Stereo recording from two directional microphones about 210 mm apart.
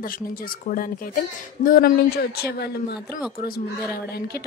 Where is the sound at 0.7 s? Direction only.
40° left (ahead or behind).